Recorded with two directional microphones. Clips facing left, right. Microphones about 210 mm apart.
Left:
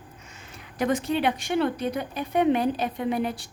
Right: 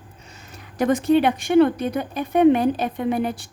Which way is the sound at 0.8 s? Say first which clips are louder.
Right 7 dB; 45° right (ahead or behind).